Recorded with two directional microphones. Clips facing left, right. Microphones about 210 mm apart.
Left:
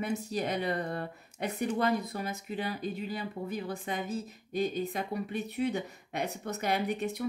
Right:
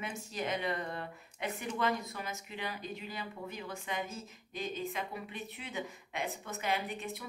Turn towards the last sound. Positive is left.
turn(degrees=40)  # may be behind; listen again after turning